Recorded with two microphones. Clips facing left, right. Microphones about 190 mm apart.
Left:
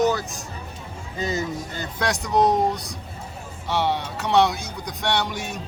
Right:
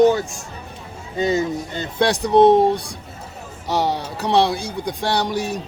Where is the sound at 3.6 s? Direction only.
40° right (ahead or behind).